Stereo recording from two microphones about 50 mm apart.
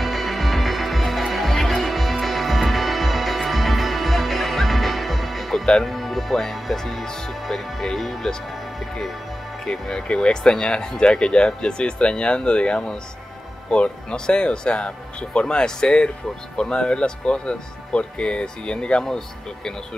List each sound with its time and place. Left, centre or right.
0.0 s music: centre
5.9 s speech: centre
9.7 s speech: centre